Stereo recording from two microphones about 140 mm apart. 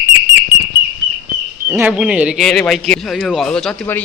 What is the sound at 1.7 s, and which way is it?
A man's voice, 10° right (ahead or behind).